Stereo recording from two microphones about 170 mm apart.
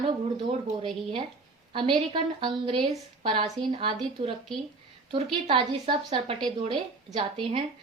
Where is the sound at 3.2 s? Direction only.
30° right (ahead or behind).